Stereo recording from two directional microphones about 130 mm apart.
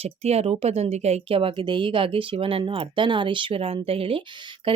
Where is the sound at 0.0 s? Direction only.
50° right (ahead or behind).